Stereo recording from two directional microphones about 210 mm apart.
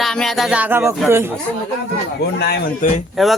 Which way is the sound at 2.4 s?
50° left (ahead or behind).